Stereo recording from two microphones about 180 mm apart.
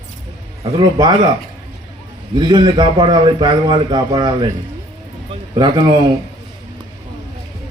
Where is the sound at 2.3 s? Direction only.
25° right (ahead or behind).